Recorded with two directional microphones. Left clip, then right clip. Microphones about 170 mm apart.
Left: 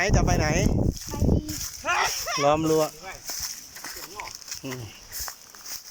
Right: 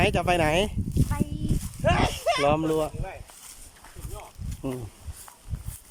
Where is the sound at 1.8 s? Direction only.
15° right (ahead or behind).